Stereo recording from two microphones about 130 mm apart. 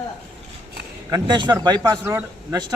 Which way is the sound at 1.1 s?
35° right (ahead or behind).